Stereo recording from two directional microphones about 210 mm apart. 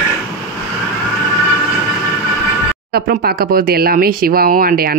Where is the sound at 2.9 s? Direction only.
50° right (ahead or behind).